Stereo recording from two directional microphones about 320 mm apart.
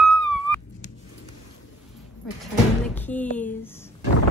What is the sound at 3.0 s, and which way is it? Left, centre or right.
Music, centre.